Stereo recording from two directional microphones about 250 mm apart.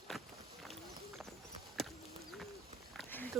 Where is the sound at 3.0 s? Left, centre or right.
Centre.